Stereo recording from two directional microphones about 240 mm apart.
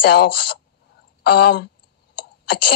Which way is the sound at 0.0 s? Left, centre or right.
Left.